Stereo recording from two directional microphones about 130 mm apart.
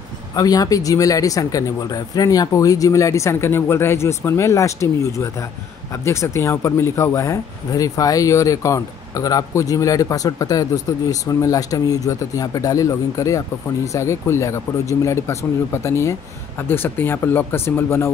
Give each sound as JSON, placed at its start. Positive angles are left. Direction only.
{"t": 0.4, "sound": "speech", "side_deg": 30}